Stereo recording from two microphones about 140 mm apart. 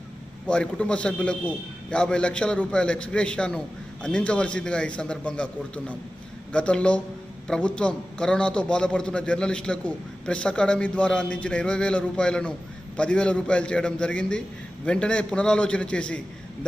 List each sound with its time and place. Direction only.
0.5 s a man's voice: 5° left (ahead or behind)